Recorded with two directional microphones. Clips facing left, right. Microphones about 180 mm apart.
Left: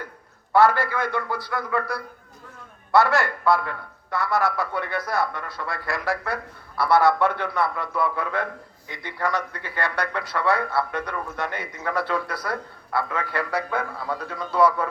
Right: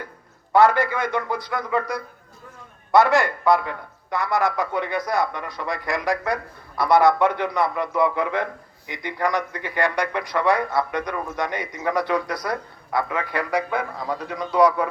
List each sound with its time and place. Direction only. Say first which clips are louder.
0.5 s a man's voice: right 2 dB; 15° right (ahead or behind)